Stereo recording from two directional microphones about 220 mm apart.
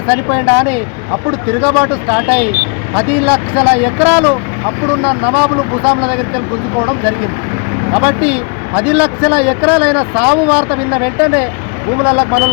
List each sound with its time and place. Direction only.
0.1 s speech: 5° right (ahead or behind)
5.8 s speech: 25° right (ahead or behind)
8.0 s speech: 5° right (ahead or behind)